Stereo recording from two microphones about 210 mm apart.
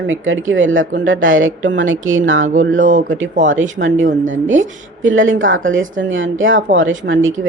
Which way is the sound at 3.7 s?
65° right (ahead or behind).